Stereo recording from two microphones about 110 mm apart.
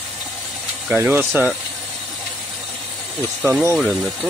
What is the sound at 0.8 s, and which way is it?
Speech, 15° right (ahead or behind).